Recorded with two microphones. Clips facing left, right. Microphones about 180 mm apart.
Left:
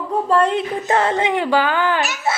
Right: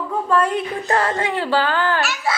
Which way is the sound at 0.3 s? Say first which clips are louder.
Left 2 dB; 25° left (ahead or behind).